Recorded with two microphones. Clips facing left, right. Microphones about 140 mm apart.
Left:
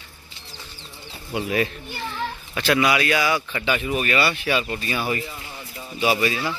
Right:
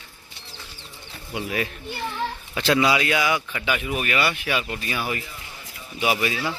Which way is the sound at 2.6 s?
25° right (ahead or behind).